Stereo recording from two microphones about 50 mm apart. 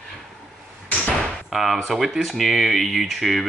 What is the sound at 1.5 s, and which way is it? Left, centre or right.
Speech, centre.